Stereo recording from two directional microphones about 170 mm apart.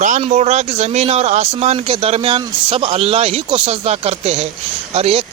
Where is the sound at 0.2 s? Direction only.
40° right (ahead or behind).